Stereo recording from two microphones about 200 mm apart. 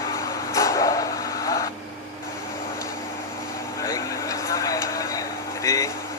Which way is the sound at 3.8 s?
15° left (ahead or behind).